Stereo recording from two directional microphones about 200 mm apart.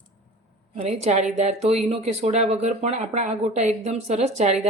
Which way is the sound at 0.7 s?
30° right (ahead or behind).